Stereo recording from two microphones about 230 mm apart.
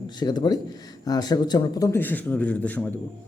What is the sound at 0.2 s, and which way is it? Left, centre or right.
Speech, centre.